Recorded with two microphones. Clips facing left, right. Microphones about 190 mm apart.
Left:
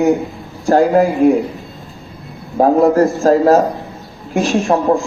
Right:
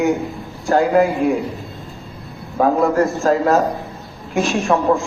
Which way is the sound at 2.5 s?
40° left (ahead or behind).